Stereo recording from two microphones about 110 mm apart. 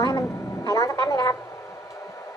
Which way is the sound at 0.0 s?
35° left (ahead or behind).